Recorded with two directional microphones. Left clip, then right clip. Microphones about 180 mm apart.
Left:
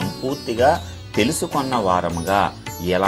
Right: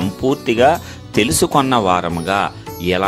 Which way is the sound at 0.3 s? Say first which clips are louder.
Right 4 dB; 45° right (ahead or behind).